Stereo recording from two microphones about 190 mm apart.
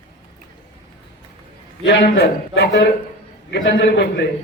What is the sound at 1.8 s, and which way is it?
A man's voice, 65° left (ahead or behind).